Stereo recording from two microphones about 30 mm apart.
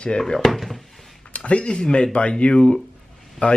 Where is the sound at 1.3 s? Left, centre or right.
Left.